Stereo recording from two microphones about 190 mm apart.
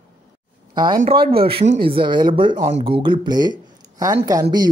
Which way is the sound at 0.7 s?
25° right (ahead or behind).